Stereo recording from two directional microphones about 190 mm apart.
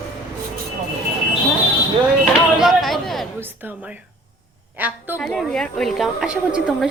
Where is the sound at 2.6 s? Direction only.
Centre (ahead or behind).